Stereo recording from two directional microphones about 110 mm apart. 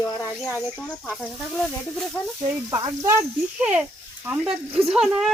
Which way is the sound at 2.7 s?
30° right (ahead or behind).